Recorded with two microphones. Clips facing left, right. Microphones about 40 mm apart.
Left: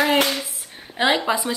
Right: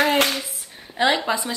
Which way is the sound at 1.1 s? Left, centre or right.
Centre.